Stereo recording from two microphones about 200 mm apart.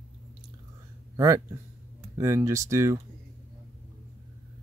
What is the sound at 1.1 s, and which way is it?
Speech, 15° right (ahead or behind).